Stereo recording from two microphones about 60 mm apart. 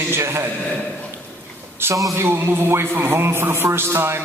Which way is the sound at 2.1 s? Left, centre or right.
Right.